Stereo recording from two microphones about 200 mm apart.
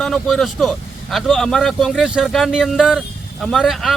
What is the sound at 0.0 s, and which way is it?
Speech, centre (ahead or behind).